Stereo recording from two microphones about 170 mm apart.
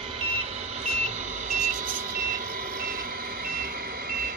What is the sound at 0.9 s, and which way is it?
Reversing beeps, 45° right (ahead or behind).